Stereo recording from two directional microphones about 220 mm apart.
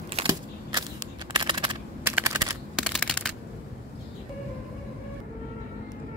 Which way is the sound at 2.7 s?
5° left (ahead or behind).